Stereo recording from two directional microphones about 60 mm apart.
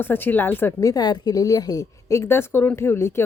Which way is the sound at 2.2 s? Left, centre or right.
Left.